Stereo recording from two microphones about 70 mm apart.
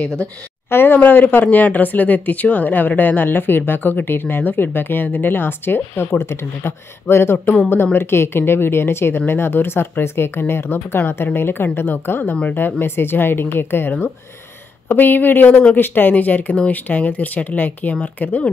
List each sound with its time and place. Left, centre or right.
0.7 s speech: left